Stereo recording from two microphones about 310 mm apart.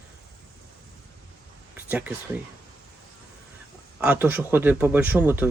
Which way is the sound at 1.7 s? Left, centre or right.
Centre.